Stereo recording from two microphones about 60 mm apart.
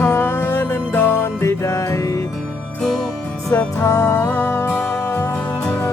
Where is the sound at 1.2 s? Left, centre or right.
Left.